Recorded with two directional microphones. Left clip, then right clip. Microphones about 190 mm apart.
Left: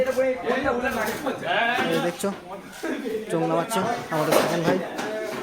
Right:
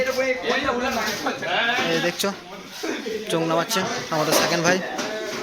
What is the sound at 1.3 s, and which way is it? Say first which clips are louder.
Speech: right 2 dB; 30° right (ahead or behind).